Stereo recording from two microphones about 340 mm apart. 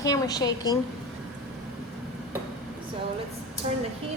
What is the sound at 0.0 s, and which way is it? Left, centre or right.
Speech, centre.